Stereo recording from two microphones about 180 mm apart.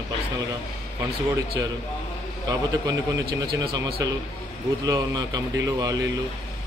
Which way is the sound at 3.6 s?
20° right (ahead or behind).